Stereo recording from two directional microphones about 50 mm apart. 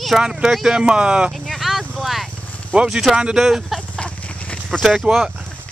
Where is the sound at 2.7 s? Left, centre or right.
Centre.